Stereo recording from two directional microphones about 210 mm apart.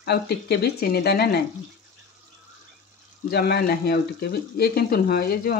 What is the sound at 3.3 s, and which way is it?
Speech, 50° left (ahead or behind).